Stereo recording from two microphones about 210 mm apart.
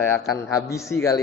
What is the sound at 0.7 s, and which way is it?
Speech, 15° left (ahead or behind).